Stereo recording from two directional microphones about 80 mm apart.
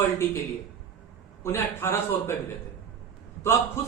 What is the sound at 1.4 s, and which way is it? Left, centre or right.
Speech, left.